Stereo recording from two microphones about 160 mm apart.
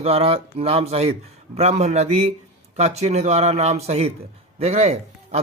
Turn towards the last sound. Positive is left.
turn(degrees=-45)  # may be behind; listen again after turning